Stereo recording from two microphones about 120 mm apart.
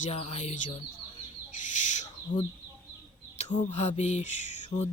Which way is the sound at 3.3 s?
70° left (ahead or behind).